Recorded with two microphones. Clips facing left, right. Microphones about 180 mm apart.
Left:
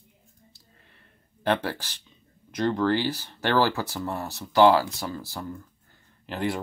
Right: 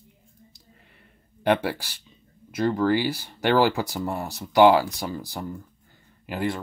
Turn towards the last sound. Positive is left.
turn(degrees=-5)  # may be behind; listen again after turning